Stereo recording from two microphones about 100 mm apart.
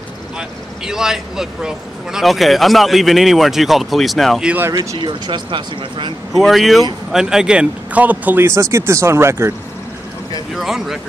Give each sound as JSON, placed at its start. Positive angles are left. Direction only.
{"t": 0.4, "sound": "speech", "side_deg": -5}
{"t": 4.9, "sound": "speech", "side_deg": -50}
{"t": 6.3, "sound": "speech", "side_deg": 0}
{"t": 8.5, "sound": "speech", "side_deg": -30}
{"t": 10.5, "sound": "speech", "side_deg": -5}